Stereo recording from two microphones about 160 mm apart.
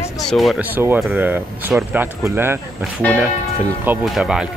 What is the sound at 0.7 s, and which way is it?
Speech, 10° right (ahead or behind).